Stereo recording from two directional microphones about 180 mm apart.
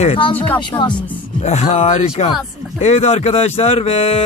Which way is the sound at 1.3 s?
40° left (ahead or behind).